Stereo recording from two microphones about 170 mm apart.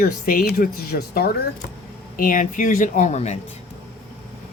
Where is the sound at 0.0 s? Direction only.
60° left (ahead or behind); by 3.3 s 40° left (ahead or behind).